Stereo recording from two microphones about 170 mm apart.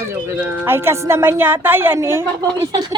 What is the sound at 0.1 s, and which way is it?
Speech, 10° right (ahead or behind).